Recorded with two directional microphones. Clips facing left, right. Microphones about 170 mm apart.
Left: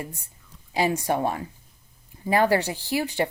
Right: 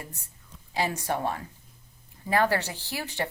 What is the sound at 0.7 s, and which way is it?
Speech, 15° left (ahead or behind).